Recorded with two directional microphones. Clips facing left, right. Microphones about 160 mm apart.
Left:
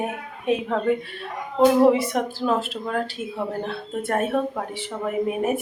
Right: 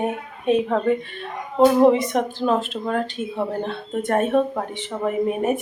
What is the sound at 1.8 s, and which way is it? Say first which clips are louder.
Speech: right 2 dB; 5° left (ahead or behind).